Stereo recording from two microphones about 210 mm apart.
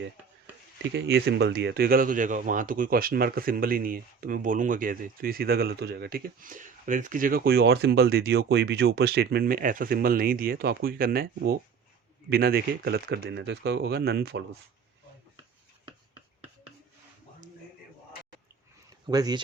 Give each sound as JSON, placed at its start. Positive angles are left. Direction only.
{"t": 0.9, "sound": "speech", "side_deg": -50}
{"t": 19.0, "sound": "speech", "side_deg": -20}